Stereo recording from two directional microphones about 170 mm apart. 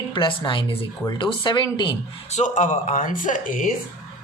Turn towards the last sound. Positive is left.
turn(degrees=50)  # may be behind; listen again after turning